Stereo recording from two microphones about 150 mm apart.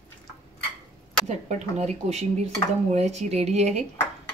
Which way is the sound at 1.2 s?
50° right (ahead or behind).